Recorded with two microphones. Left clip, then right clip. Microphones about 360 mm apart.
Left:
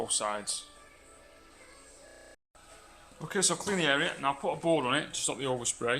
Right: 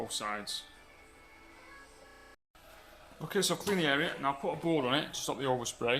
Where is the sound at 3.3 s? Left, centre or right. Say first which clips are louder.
Left 1 dB; centre.